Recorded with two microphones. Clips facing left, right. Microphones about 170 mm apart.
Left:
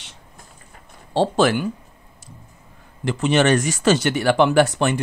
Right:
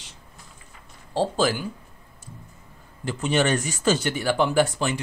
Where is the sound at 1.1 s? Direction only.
75° left (ahead or behind).